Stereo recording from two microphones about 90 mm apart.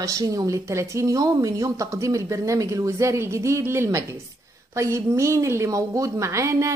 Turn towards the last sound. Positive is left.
turn(degrees=-35)  # may be behind; listen again after turning